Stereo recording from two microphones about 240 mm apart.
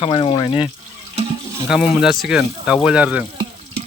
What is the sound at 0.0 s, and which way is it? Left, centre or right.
Speech, left.